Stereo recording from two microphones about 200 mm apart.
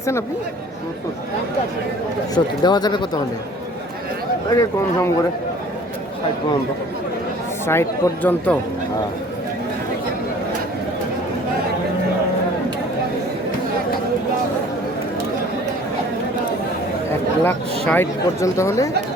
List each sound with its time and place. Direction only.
2.3 s speech: 20° left (ahead or behind)
4.5 s speech: 15° left (ahead or behind)
7.7 s speech: 10° left (ahead or behind)
17.4 s speech: 10° left (ahead or behind)